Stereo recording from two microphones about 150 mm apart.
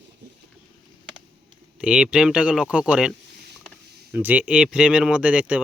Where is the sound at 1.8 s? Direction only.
5° right (ahead or behind).